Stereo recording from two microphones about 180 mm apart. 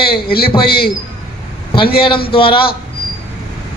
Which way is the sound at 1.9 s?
30° left (ahead or behind).